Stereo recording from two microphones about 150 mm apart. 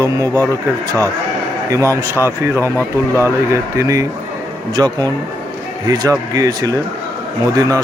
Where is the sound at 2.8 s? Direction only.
15° left (ahead or behind).